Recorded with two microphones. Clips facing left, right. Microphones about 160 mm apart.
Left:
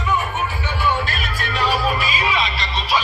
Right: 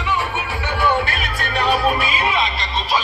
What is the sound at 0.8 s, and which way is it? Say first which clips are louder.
Music: right 3 dB; 60° right (ahead or behind).